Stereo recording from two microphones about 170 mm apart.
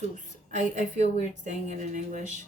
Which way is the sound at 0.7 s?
45° right (ahead or behind).